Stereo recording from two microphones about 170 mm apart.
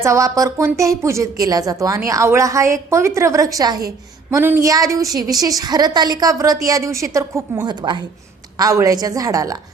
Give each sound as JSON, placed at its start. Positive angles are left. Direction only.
{"t": 0.0, "sound": "speech", "side_deg": -20}